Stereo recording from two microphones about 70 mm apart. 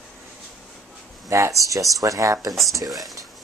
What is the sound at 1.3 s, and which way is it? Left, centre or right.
Speech, right.